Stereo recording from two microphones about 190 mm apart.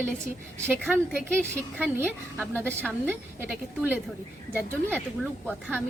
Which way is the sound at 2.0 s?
5° left (ahead or behind).